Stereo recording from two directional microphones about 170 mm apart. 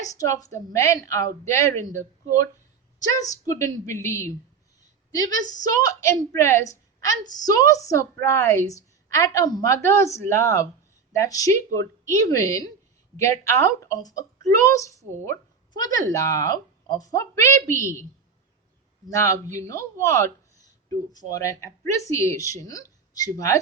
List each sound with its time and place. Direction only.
0.2 s a woman's voice: 20° left (ahead or behind)
3.2 s a woman's voice: 20° left (ahead or behind)
19.0 s a woman's voice: 20° left (ahead or behind)